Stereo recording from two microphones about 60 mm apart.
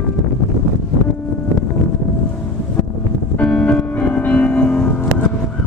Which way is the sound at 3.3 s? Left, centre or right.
Left.